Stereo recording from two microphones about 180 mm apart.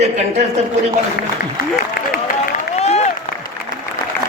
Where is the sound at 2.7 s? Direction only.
35° left (ahead or behind).